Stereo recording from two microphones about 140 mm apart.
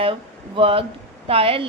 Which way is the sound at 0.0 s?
40° right (ahead or behind).